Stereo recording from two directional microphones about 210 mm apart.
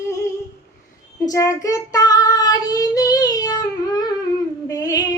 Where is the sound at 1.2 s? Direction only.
15° left (ahead or behind).